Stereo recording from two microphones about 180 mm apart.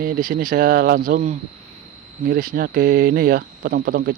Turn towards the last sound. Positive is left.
turn(degrees=-55)  # may be behind; listen again after turning